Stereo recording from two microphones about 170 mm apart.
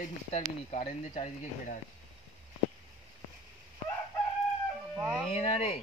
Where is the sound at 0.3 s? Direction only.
40° left (ahead or behind).